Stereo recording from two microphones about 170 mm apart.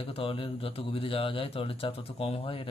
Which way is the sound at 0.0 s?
35° left (ahead or behind).